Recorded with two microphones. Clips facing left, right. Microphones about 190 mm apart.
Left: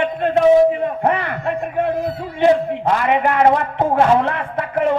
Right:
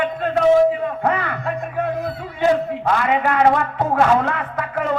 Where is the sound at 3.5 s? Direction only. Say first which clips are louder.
Left 2 dB; 25° left (ahead or behind).